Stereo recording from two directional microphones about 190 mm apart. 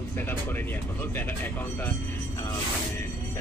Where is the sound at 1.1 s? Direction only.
10° left (ahead or behind).